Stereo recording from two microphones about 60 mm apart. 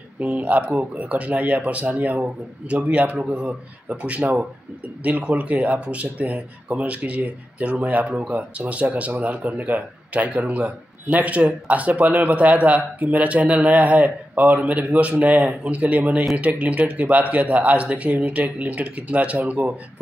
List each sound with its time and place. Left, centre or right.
0.2 s speech: right